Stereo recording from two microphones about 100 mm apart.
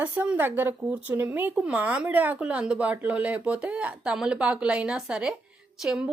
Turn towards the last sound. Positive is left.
turn(degrees=-5)  # may be behind; listen again after turning